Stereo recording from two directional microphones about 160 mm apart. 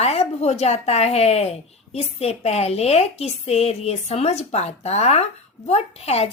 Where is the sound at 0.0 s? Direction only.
40° left (ahead or behind).